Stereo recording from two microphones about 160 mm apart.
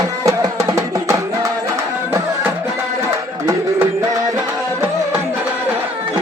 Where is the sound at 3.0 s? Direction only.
20° right (ahead or behind).